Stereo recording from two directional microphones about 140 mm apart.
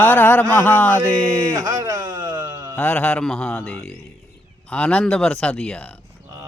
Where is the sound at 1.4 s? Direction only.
25° right (ahead or behind).